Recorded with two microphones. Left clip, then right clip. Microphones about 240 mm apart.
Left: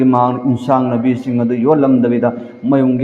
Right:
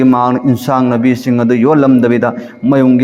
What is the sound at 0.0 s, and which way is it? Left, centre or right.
A man's voice, right.